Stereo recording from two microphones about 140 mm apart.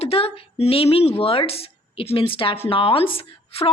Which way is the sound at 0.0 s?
45° left (ahead or behind).